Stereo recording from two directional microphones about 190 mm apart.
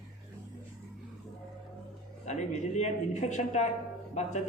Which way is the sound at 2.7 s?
35° left (ahead or behind).